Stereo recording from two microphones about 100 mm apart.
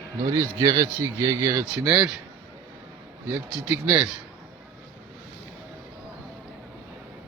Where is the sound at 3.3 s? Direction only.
15° right (ahead or behind).